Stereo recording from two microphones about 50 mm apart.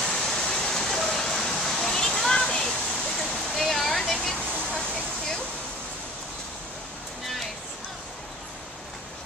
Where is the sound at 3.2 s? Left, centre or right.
Centre.